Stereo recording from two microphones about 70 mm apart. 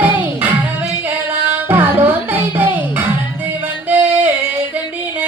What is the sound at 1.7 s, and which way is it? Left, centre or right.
Music, right.